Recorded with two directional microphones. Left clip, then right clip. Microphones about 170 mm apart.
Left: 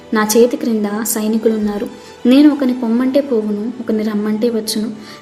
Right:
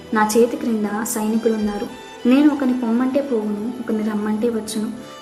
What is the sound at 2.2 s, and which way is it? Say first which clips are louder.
A woman's voice: left 5 dB; 25° left (ahead or behind).